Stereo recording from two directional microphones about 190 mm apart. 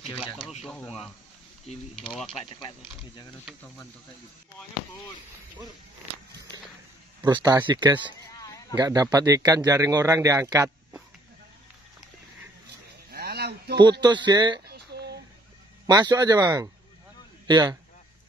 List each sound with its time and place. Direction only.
0.4 s speech: 35° left (ahead or behind)
0.7 s speech: 5° left (ahead or behind)
7.2 s a man's voice: 20° right (ahead or behind)
13.1 s a sound: 55° right (ahead or behind)
14.0 s speech: 20° right (ahead or behind)
14.7 s a sound: 60° right (ahead or behind)
15.9 s speech: 20° right (ahead or behind)